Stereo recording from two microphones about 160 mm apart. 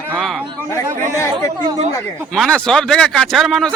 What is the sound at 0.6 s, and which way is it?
Speech, 15° left (ahead or behind).